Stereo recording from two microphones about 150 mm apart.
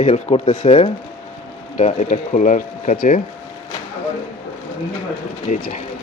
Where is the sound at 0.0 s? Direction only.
45° left (ahead or behind).